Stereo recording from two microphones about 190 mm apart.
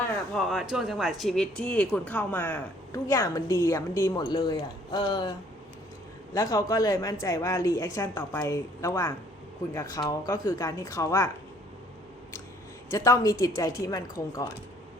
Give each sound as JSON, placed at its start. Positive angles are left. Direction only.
{"t": 0.3, "sound": "speech", "side_deg": 0}
{"t": 6.3, "sound": "speech", "side_deg": 15}
{"t": 12.9, "sound": "speech", "side_deg": 15}